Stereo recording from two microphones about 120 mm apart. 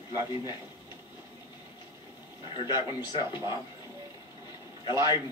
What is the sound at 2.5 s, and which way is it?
Speech, 35° left (ahead or behind).